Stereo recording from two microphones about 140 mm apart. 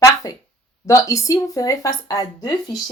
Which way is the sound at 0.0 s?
25° left (ahead or behind).